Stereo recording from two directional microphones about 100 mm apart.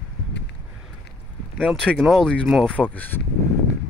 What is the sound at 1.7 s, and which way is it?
Speech, 5° left (ahead or behind).